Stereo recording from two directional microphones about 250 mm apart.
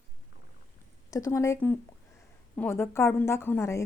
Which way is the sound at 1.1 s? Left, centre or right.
Centre.